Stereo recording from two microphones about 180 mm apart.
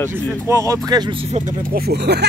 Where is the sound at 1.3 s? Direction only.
45° right (ahead or behind); by 2.2 s 65° right (ahead or behind).